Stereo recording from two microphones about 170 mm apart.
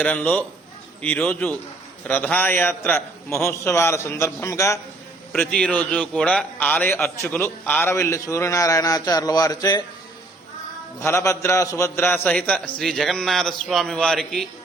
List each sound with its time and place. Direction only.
0.0 s a man's voice: 10° left (ahead or behind)
5.3 s a man's voice: 5° left (ahead or behind); by 9.8 s 25° left (ahead or behind)
11.0 s a man's voice: 15° left (ahead or behind)